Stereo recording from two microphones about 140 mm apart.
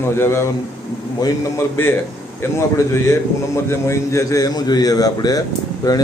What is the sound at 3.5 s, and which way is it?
A man's voice, 20° left (ahead or behind).